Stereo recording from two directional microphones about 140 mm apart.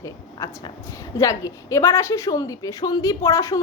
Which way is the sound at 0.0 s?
25° left (ahead or behind).